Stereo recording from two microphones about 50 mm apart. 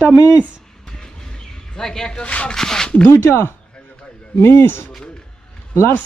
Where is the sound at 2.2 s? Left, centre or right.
Left.